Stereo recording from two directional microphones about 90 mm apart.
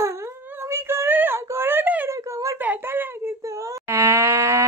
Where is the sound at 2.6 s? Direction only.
20° right (ahead or behind).